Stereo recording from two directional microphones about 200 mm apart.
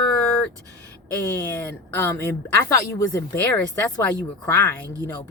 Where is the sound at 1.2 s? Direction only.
10° left (ahead or behind).